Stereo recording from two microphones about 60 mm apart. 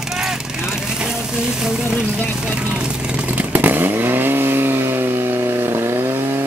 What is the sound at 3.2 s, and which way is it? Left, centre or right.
Chainsaw, right.